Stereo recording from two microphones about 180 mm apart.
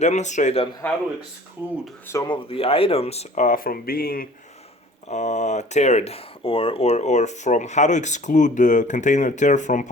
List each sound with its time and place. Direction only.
0.0 s speech: 40° left (ahead or behind)
1.6 s speech: 15° right (ahead or behind)
2.0 s speech: 20° left (ahead or behind); by 4.3 s 55° left (ahead or behind)
5.0 s speech: 40° left (ahead or behind)